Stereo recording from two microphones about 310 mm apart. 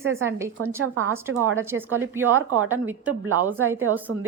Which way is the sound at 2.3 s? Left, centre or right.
Right.